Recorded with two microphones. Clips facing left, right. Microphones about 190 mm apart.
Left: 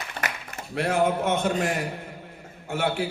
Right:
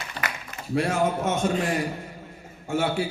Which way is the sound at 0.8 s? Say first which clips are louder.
Left 1 dB; 60° left (ahead or behind).